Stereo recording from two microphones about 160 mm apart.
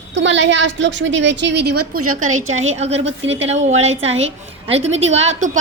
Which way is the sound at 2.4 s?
40° right (ahead or behind).